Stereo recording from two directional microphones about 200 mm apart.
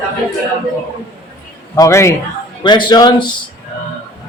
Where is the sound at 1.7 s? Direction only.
15° left (ahead or behind).